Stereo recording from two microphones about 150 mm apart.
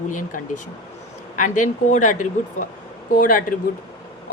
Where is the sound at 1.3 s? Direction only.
60° left (ahead or behind).